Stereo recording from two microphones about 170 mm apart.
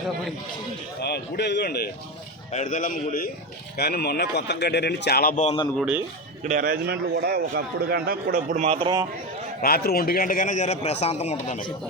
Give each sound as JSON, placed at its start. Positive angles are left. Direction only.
{"t": 1.0, "sound": "speech", "side_deg": 75}
{"t": 2.5, "sound": "a man's voice", "side_deg": 45}
{"t": 3.8, "sound": "speech", "side_deg": 70}
{"t": 5.7, "sound": "a man's voice", "side_deg": -5}
{"t": 6.4, "sound": "a man's voice", "side_deg": -50}
{"t": 9.6, "sound": "a man's voice", "side_deg": 65}